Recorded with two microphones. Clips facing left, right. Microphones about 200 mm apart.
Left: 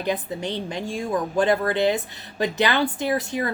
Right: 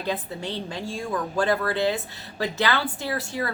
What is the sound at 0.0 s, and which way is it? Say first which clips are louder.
Speech: left 3 dB; 15° left (ahead or behind).